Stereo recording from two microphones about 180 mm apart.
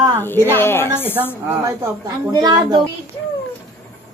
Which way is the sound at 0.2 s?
15° left (ahead or behind).